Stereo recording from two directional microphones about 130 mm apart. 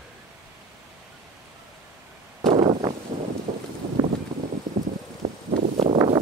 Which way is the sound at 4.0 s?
25° right (ahead or behind).